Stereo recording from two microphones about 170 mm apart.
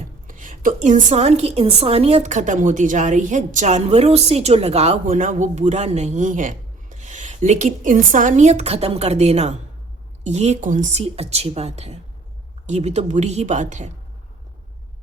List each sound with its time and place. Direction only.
0.3 s a woman's voice: 50° right (ahead or behind)